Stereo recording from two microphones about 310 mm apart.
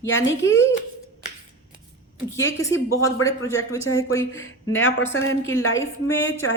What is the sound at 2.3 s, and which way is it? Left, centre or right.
Speech, centre.